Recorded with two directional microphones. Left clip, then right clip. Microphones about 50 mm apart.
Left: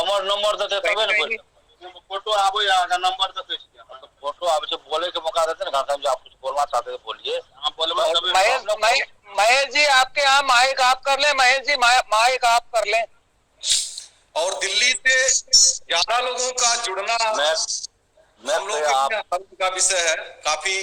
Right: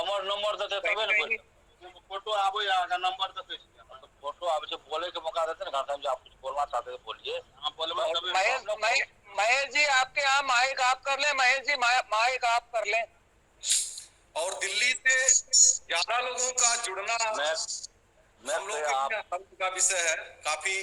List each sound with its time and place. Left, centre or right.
0.0 s a man's voice: left